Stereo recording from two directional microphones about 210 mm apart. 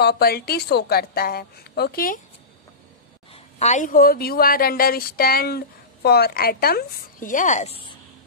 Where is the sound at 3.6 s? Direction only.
35° left (ahead or behind).